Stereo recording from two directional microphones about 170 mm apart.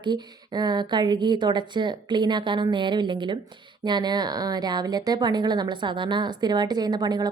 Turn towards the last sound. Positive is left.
turn(degrees=-25)  # may be behind; listen again after turning